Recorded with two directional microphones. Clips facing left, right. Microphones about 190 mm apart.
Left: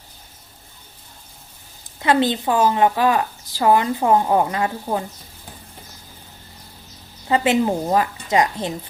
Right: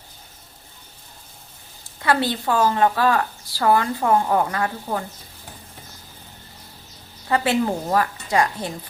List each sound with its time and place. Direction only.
2.0 s a woman's voice: 20° left (ahead or behind)
7.3 s a woman's voice: 20° left (ahead or behind)